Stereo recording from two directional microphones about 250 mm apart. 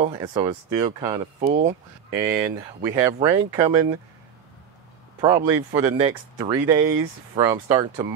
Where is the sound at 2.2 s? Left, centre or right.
Centre.